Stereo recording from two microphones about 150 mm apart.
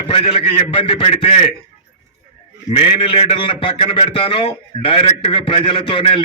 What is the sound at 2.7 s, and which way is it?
A man's voice, 35° left (ahead or behind).